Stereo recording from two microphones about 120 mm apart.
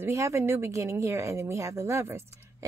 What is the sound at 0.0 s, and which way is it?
A woman's voice, 25° right (ahead or behind).